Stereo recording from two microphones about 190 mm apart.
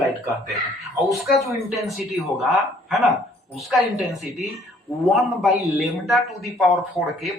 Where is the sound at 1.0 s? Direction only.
Centre (ahead or behind).